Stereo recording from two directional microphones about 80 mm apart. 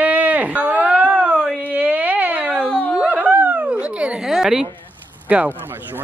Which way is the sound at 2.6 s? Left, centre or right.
Centre.